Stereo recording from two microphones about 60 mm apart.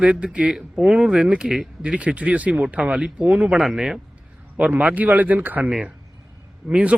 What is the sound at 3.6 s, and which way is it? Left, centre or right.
Speech, centre.